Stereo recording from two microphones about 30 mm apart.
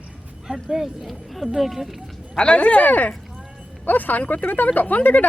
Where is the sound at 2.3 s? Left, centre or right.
Left.